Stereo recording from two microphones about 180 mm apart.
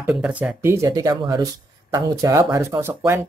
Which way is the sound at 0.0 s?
5° right (ahead or behind).